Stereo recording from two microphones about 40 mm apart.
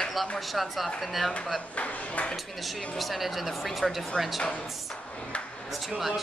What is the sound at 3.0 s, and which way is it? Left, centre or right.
A woman's voice, centre.